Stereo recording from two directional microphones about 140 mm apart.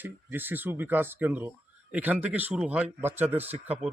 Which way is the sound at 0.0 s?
15° right (ahead or behind).